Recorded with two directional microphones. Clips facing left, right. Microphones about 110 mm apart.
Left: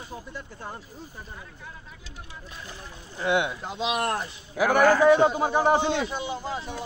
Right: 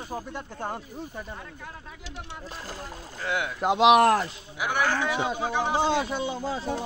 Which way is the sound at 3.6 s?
75° right (ahead or behind).